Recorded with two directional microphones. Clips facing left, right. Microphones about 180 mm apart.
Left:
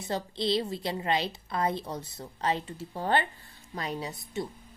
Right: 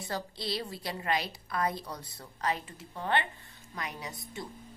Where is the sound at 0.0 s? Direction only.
25° left (ahead or behind).